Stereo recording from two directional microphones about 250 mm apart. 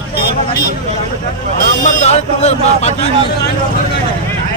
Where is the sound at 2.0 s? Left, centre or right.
Left.